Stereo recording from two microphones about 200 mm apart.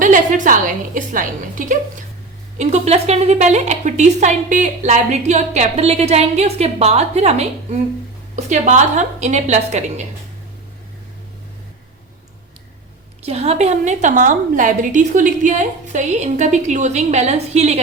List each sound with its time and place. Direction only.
0.0 s a woman's voice: 40° right (ahead or behind)
13.2 s a woman's voice: 30° right (ahead or behind)